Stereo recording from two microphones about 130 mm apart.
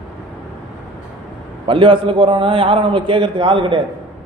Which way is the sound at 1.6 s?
40° right (ahead or behind).